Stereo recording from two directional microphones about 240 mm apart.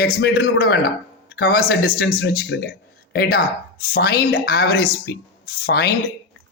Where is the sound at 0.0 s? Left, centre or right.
Left.